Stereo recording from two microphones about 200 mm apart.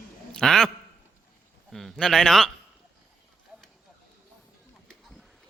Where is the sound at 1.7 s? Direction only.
Centre (ahead or behind).